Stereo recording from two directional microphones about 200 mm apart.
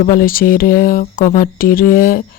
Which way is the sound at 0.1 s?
45° left (ahead or behind).